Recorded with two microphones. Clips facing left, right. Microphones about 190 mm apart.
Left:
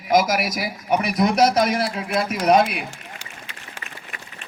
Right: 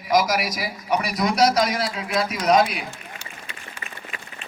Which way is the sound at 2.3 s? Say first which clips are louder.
Left 4 dB; 55° left (ahead or behind).